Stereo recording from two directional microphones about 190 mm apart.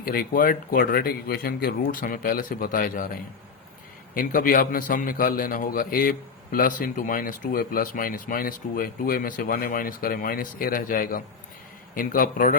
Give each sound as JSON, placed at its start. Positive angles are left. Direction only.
{"t": 0.0, "sound": "a man's voice", "side_deg": 50}